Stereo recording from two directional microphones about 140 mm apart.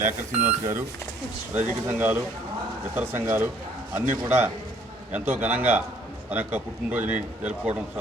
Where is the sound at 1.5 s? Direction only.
15° right (ahead or behind).